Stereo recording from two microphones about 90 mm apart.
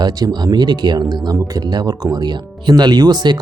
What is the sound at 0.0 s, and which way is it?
Speech, 45° right (ahead or behind).